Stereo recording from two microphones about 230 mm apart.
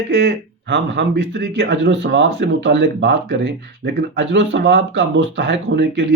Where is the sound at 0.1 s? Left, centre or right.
Right.